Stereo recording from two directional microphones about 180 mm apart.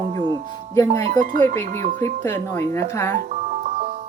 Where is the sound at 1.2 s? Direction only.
45° right (ahead or behind).